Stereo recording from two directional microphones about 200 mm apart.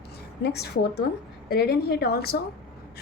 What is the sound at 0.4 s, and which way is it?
A woman's voice, 55° left (ahead or behind).